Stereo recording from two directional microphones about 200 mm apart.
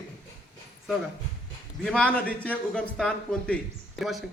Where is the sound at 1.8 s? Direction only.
5° left (ahead or behind).